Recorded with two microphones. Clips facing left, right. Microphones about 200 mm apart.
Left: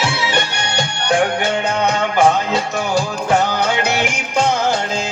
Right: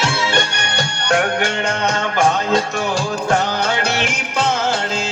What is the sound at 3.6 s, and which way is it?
Music, 15° left (ahead or behind).